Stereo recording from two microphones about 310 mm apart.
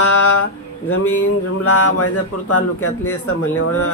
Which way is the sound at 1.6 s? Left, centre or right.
Left.